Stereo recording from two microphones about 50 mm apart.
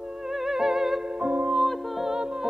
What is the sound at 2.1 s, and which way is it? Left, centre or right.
Music, centre.